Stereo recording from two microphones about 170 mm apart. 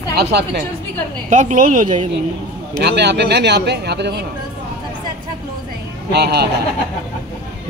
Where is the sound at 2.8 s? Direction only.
80° right.